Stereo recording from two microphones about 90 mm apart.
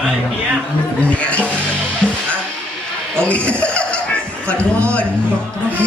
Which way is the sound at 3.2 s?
15° left (ahead or behind).